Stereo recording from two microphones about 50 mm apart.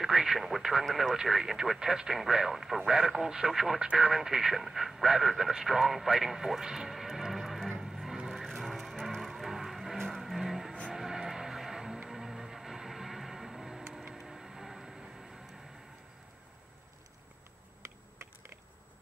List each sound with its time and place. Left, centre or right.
0.0 s speech: centre
3.8 s speech: right
4.1 s speech: centre
7.8 s vehicle: centre
12.1 s music: centre
14.1 s a sound: centre